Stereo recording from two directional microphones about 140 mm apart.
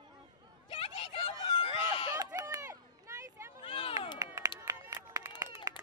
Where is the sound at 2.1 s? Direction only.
25° right (ahead or behind).